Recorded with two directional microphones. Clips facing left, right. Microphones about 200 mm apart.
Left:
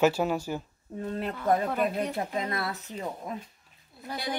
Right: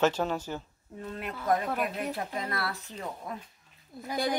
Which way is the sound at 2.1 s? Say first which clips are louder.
Left 3 dB; 20° left (ahead or behind).